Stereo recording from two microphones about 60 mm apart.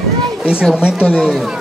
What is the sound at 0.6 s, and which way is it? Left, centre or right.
Speech, centre.